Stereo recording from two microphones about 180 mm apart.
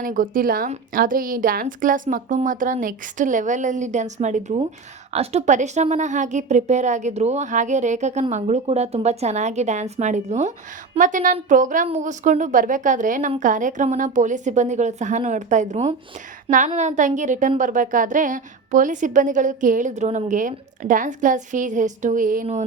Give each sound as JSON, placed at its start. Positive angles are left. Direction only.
{"t": 0.0, "sound": "a woman's voice", "side_deg": -50}